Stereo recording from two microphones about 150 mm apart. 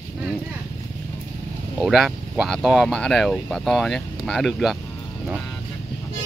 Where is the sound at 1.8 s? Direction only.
5° right (ahead or behind).